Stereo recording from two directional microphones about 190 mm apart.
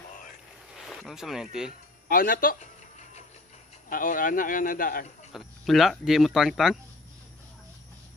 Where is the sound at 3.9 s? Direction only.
45° left (ahead or behind).